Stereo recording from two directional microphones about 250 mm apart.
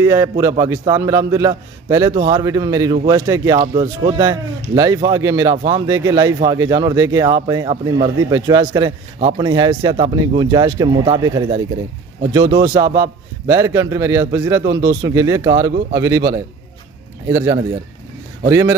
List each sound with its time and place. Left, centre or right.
0.0 s speech: centre
17.3 s speech: centre